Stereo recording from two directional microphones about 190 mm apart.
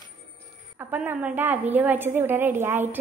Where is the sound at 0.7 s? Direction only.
10° right (ahead or behind).